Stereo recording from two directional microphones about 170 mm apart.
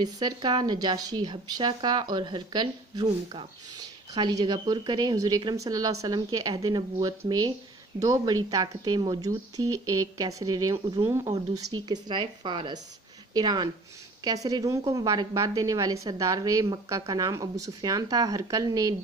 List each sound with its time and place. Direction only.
0.0 s speech: 25° right (ahead or behind)